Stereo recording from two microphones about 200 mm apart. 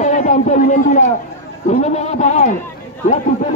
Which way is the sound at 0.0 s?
35° left (ahead or behind).